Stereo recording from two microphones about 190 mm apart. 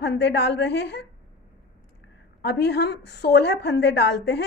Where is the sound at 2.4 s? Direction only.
60° left (ahead or behind).